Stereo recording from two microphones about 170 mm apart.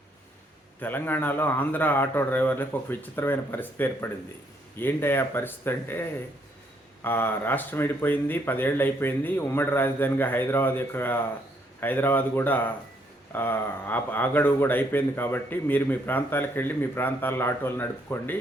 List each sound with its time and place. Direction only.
0.8 s speech: 10° left (ahead or behind)